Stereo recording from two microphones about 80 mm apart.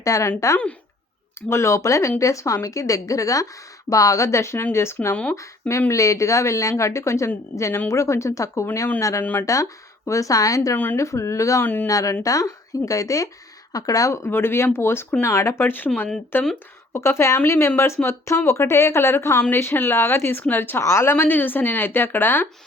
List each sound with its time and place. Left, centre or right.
0.0 s speech: left
9.2 s a woman's voice: left
10.1 s speech: left
11.6 s a woman's voice: left
11.9 s speech: left
14.3 s a woman's voice: left